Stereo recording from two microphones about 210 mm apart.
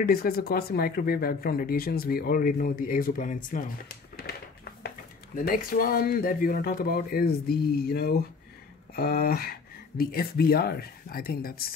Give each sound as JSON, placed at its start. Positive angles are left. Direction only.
{"t": 0.0, "sound": "speech", "side_deg": 45}